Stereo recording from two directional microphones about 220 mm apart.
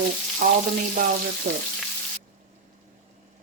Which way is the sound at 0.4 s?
40° right (ahead or behind).